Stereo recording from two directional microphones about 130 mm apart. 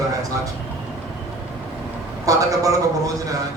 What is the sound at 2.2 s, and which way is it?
A man's voice, 25° right (ahead or behind).